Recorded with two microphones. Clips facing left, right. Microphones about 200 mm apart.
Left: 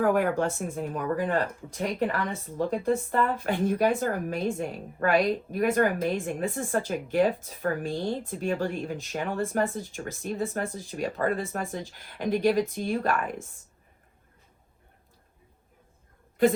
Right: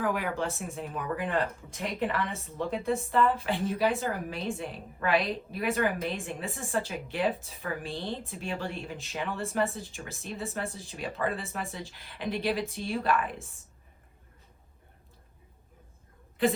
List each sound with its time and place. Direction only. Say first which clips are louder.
0.0 s speech: left 6 dB; 50° left (ahead or behind)
2.6 s speech: left 4 dB; 45° left (ahead or behind)